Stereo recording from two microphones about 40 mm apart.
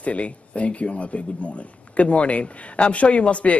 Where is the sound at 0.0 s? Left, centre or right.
Left.